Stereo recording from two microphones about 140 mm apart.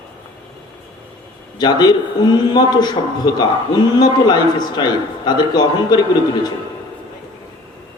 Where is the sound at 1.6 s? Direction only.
30° left (ahead or behind).